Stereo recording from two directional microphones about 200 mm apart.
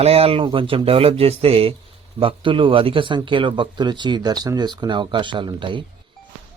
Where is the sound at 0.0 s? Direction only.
30° right (ahead or behind).